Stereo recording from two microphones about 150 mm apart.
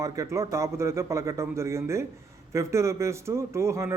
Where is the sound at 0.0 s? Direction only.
20° right (ahead or behind).